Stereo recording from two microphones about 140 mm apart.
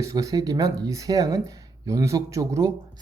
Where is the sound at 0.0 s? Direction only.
25° right (ahead or behind).